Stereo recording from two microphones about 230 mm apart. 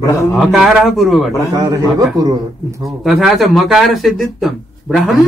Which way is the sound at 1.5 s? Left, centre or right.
Centre.